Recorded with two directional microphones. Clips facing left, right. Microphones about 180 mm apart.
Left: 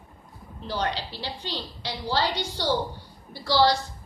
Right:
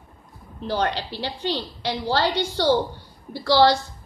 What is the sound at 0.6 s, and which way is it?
A woman's voice, 55° right (ahead or behind).